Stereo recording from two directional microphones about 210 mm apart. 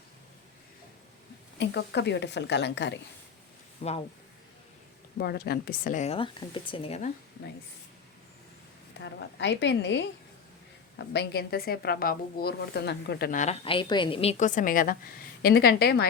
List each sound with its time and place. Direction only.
1.5 s a woman's voice: 55° left (ahead or behind)
3.8 s speech: 30° left (ahead or behind)
5.1 s speech: 50° left (ahead or behind); by 7.1 s 30° left (ahead or behind)
9.0 s a woman's voice: 55° left (ahead or behind)